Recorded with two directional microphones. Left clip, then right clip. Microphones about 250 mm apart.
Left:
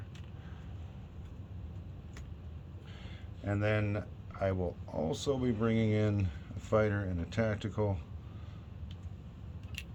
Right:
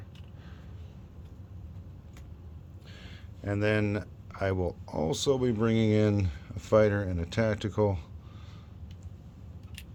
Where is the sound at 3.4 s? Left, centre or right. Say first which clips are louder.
Right 5 dB; right.